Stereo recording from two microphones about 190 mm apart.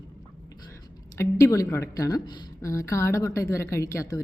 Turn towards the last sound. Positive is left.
turn(degrees=15)  # may be behind; listen again after turning